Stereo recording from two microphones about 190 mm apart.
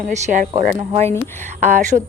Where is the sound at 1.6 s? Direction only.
40° right (ahead or behind).